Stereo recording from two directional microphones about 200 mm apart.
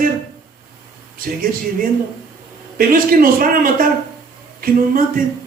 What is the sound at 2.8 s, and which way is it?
Speech, 45° right (ahead or behind).